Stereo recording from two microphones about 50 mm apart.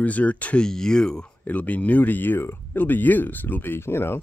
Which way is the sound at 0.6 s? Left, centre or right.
Centre.